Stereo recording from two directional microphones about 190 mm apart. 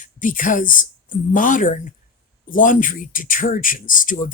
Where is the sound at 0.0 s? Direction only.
45° left (ahead or behind).